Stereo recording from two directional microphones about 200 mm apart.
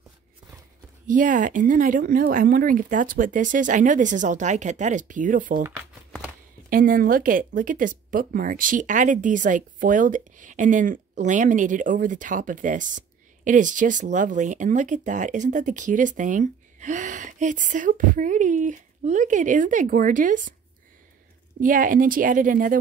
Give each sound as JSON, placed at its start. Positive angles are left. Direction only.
{"t": 1.0, "sound": "speech", "side_deg": -40}
{"t": 5.6, "sound": "speech", "side_deg": -15}
{"t": 6.7, "sound": "speech", "side_deg": -45}
{"t": 21.5, "sound": "a woman's voice", "side_deg": -45}